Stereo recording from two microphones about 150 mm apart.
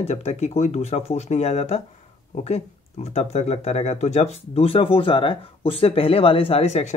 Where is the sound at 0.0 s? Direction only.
45° left (ahead or behind).